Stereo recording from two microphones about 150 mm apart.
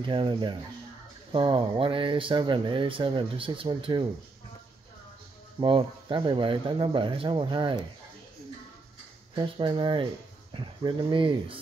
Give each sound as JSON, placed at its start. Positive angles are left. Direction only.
{"t": 0.0, "sound": "speech", "side_deg": -35}
{"t": 5.6, "sound": "speech", "side_deg": -35}
{"t": 9.3, "sound": "speech", "side_deg": -30}